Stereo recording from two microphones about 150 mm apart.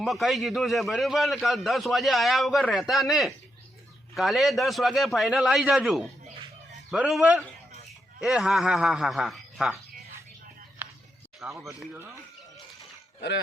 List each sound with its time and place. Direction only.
0.0 s a man's voice: centre (ahead or behind)
10.8 s a sound: 10° right (ahead or behind)
11.4 s speech: 15° right (ahead or behind)